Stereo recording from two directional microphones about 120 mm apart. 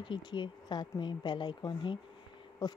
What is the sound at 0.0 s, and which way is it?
Speech, 40° left (ahead or behind).